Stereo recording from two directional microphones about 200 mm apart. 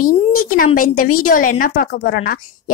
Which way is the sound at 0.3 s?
45° left (ahead or behind).